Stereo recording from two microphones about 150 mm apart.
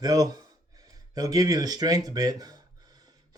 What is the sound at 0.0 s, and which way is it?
Speech, 25° right (ahead or behind).